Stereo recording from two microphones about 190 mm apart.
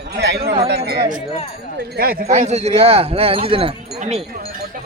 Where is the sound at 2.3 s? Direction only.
35° right (ahead or behind).